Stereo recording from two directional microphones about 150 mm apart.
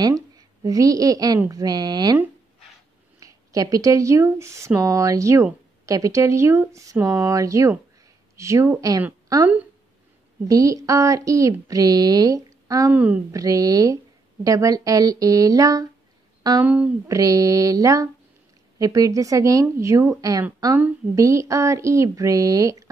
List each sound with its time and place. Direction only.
0.0 s a woman's voice: 25° right (ahead or behind)
3.2 s speech: 20° right (ahead or behind)
10.5 s speech: 20° right (ahead or behind)
12.9 s a woman's voice: 10° right (ahead or behind)
13.3 s speech: 25° right (ahead or behind)
16.6 s a woman's voice: 10° right (ahead or behind)
17.1 s speech: 25° right (ahead or behind)